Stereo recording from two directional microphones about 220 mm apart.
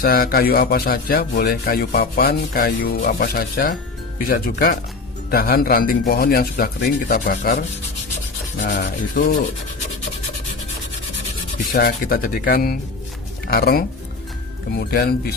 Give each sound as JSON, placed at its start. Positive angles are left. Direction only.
{"t": 0.0, "sound": "speech", "side_deg": 45}
{"t": 8.7, "sound": "speech", "side_deg": 35}
{"t": 11.7, "sound": "speech", "side_deg": 40}